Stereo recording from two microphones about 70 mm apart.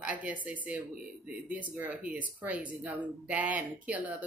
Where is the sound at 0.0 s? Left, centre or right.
Right.